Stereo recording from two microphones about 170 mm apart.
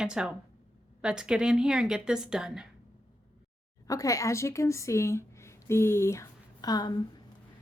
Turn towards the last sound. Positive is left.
turn(degrees=25)  # may be behind; listen again after turning